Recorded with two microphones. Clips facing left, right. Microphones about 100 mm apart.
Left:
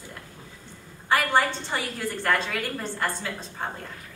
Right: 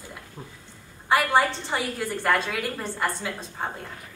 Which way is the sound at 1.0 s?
5° right (ahead or behind).